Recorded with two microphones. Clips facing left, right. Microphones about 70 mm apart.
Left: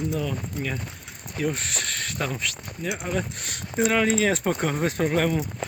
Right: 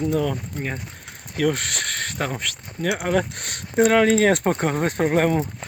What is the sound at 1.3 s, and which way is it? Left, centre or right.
Speech, right.